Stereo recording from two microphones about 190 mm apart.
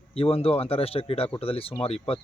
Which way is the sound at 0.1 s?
30° left (ahead or behind).